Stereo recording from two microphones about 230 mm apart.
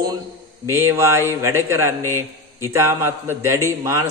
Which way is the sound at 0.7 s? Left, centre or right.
Centre.